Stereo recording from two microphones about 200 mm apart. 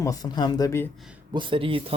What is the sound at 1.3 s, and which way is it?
Speech, 25° right (ahead or behind).